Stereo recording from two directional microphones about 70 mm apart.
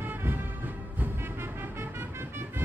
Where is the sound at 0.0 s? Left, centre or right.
Right.